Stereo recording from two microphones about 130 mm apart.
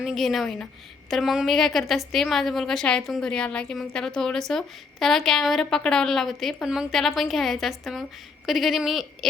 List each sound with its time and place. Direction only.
0.0 s a woman's voice: centre (ahead or behind)